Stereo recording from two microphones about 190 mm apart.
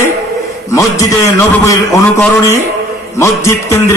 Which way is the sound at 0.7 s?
15° left (ahead or behind).